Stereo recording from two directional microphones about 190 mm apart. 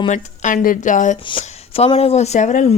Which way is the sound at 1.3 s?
30° left (ahead or behind).